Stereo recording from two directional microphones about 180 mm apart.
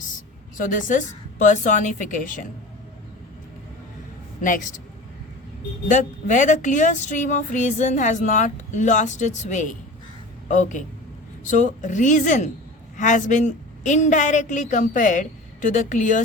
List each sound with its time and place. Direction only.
0.5 s speech: 45° left (ahead or behind)
4.4 s a woman's voice: 45° left (ahead or behind)
5.9 s speech: 45° left (ahead or behind)